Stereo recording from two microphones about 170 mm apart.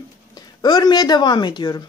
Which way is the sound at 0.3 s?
25° left (ahead or behind).